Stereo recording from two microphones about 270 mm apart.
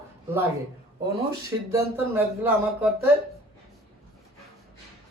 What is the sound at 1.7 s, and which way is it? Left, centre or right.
Speech, centre.